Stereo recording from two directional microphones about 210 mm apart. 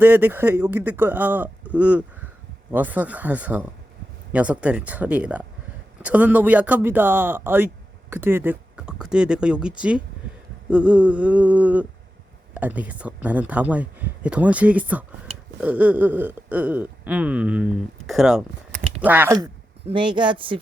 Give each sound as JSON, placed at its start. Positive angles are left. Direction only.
{"t": 0.0, "sound": "speech", "side_deg": -10}
{"t": 19.8, "sound": "speech", "side_deg": -20}